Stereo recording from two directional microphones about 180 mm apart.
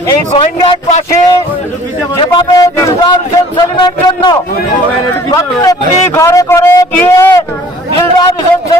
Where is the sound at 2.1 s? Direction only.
25° left (ahead or behind).